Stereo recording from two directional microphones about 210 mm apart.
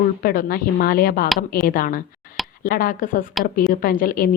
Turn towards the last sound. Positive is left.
turn(degrees=40)  # may be behind; listen again after turning